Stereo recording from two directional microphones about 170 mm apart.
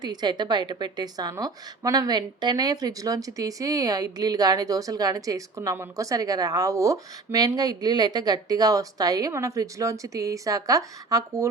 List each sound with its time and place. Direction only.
0.0 s a woman's voice: 25° right (ahead or behind)